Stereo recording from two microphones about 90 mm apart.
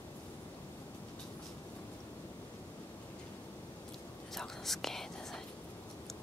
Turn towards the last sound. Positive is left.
turn(degrees=5)  # may be behind; listen again after turning